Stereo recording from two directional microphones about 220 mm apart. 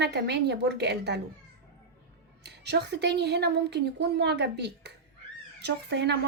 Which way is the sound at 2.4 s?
50° right (ahead or behind).